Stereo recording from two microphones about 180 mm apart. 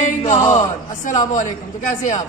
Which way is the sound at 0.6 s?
40° left (ahead or behind).